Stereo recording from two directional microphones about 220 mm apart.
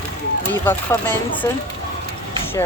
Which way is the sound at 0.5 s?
10° left (ahead or behind).